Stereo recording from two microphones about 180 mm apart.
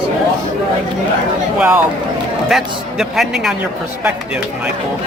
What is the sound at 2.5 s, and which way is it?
Speech, centre (ahead or behind).